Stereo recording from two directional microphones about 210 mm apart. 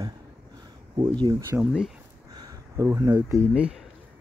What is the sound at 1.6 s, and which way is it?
Speech, 5° right (ahead or behind).